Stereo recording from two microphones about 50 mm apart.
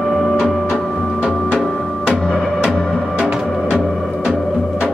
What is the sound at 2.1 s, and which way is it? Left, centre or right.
Music, centre.